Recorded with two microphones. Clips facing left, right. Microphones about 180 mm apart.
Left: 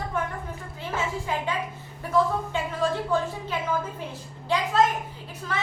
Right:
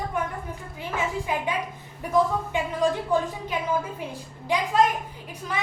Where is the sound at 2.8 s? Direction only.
15° right (ahead or behind).